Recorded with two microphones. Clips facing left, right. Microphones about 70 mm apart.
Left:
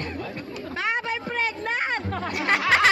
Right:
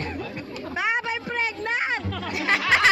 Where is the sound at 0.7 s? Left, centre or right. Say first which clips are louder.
Right 1 dB; centre.